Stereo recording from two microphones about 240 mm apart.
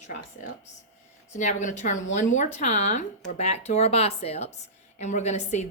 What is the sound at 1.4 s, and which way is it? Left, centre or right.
A woman's voice, left.